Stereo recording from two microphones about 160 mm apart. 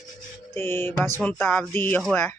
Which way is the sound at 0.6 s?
15° left (ahead or behind).